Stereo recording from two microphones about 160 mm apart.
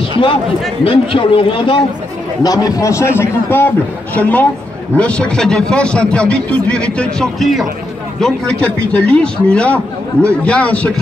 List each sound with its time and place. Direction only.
0.1 s a man's voice: 35° left (ahead or behind)
2.4 s a man's voice: 20° left (ahead or behind)